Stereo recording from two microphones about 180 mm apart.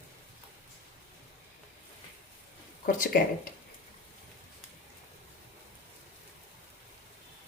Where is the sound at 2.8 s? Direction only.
50° left (ahead or behind).